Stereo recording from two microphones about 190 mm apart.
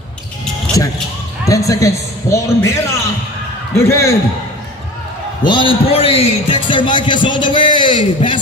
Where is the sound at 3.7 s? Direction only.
15° left (ahead or behind).